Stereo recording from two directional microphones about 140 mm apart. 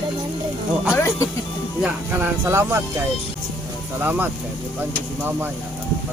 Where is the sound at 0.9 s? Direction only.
20° left (ahead or behind).